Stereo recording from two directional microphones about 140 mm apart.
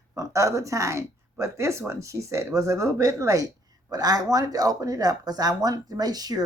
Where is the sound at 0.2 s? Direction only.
20° right (ahead or behind).